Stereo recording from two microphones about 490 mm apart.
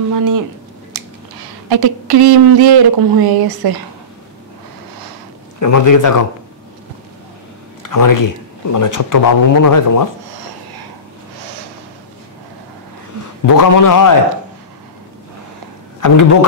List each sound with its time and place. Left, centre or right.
0.1 s speech: right
1.7 s speech: right
5.6 s speech: left
7.8 s speech: left
13.5 s speech: left
16.0 s speech: left